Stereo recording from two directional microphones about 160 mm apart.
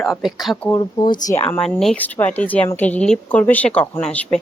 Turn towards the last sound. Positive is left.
turn(degrees=5)  # may be behind; listen again after turning